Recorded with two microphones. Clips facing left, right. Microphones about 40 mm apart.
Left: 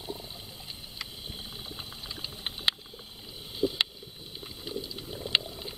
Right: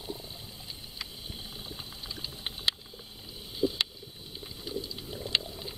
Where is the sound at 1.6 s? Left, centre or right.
Centre.